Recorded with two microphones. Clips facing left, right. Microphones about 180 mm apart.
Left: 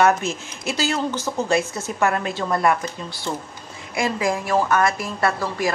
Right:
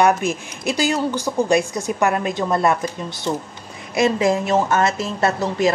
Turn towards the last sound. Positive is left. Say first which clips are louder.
# right 3 dB
turn(degrees=-25)  # may be behind; listen again after turning